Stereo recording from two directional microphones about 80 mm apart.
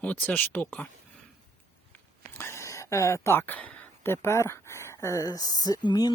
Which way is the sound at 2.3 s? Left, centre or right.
Left.